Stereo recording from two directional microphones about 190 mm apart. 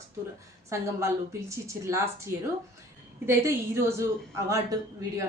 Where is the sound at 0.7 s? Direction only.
15° right (ahead or behind).